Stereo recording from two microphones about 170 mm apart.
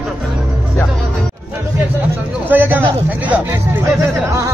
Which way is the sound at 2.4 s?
10° right (ahead or behind).